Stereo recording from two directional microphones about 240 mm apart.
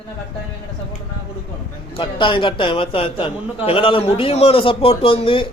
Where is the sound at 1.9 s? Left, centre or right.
Centre.